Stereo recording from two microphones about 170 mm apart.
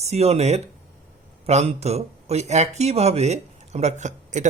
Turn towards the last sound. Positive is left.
turn(degrees=-45)  # may be behind; listen again after turning